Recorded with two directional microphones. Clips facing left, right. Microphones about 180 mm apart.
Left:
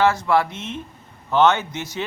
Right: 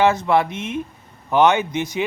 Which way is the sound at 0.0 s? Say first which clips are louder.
Right 2 dB; 20° right (ahead or behind).